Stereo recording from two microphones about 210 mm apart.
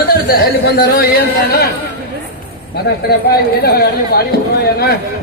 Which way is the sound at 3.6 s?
50° left (ahead or behind).